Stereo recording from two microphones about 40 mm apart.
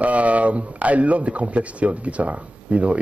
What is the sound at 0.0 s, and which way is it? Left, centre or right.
Speech, right.